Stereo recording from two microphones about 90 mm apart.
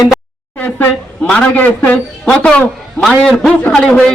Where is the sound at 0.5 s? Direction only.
20° left (ahead or behind).